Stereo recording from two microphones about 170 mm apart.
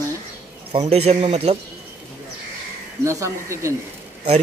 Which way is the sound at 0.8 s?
35° right (ahead or behind).